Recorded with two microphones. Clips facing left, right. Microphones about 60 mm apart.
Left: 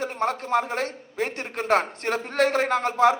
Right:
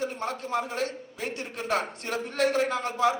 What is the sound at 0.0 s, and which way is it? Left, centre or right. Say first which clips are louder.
A man's voice: left 5 dB; left.